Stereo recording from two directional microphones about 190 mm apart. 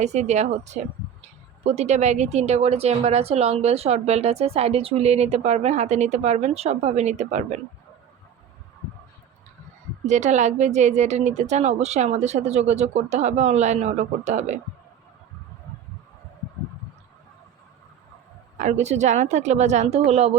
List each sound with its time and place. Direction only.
0.0 s a woman's voice: 35° right (ahead or behind)
10.1 s a woman's voice: 35° right (ahead or behind)
18.5 s a woman's voice: 40° right (ahead or behind)